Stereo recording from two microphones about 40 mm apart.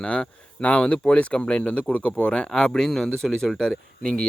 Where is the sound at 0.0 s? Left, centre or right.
Left.